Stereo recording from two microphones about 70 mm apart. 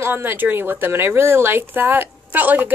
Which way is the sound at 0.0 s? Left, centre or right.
Right.